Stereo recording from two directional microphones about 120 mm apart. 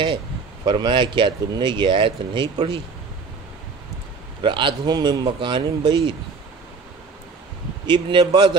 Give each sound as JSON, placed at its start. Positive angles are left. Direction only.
{"t": 0.7, "sound": "speech", "side_deg": -40}
{"t": 4.4, "sound": "speech", "side_deg": -40}
{"t": 7.8, "sound": "speech", "side_deg": -40}